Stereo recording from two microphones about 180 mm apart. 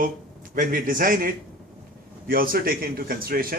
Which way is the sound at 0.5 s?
50° right (ahead or behind).